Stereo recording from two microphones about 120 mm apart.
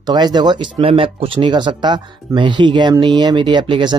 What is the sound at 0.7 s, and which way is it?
Speech, 50° right (ahead or behind).